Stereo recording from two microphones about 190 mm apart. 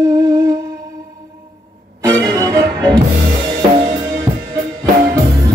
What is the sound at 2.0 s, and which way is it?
Music, 15° right (ahead or behind).